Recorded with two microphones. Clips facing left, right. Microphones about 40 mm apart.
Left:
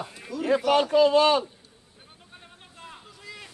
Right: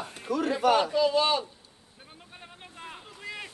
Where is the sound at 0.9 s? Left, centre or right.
Left.